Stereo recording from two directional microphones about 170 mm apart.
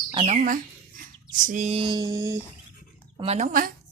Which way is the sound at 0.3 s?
50° right (ahead or behind).